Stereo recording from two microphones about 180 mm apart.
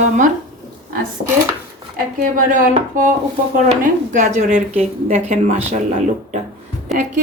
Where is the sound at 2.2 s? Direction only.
45° right (ahead or behind).